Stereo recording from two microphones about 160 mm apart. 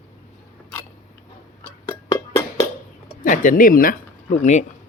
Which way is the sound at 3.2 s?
55° left (ahead or behind).